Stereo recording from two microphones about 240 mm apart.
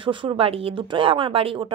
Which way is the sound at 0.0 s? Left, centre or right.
Right.